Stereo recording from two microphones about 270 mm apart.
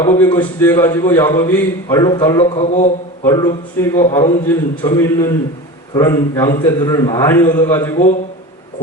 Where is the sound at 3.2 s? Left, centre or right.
Centre.